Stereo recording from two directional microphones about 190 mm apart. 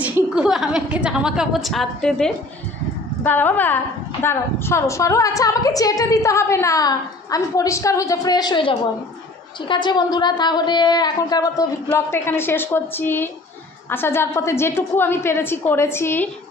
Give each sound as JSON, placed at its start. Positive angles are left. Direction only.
{"t": 0.0, "sound": "a woman's voice", "side_deg": -5}